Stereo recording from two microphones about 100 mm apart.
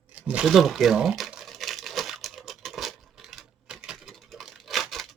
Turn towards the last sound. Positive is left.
turn(degrees=0)  # may be behind; listen again after turning